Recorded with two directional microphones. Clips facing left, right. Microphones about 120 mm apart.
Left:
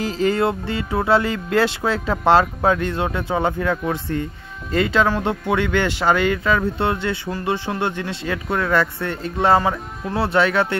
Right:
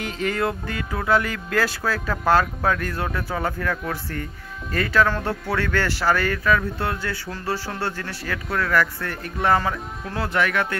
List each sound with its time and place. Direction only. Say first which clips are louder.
0.0 s music: left 5 dB; 30° left (ahead or behind)